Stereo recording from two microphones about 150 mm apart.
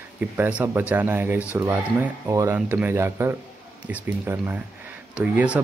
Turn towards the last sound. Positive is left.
turn(degrees=-10)  # may be behind; listen again after turning